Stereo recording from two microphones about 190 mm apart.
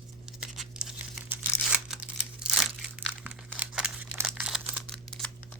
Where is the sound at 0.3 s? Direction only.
Centre (ahead or behind).